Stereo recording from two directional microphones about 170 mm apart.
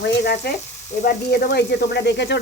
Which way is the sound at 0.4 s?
70° left (ahead or behind).